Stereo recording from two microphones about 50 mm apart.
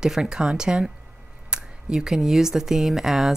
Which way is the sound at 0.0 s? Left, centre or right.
Centre.